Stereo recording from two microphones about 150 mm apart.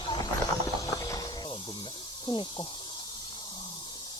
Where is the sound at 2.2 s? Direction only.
30° left (ahead or behind).